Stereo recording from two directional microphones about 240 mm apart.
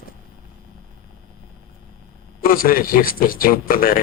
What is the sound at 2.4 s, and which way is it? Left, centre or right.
A man's voice, left.